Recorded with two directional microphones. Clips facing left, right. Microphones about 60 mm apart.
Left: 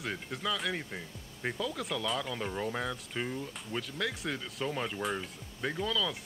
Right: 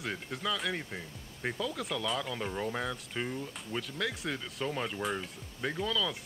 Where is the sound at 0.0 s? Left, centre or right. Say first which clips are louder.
Even; centre.